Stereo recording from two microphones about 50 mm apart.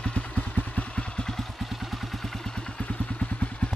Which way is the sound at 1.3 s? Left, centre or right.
Centre.